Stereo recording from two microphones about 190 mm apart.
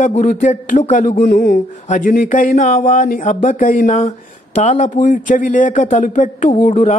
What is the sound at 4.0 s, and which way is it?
A man's voice, 35° left (ahead or behind).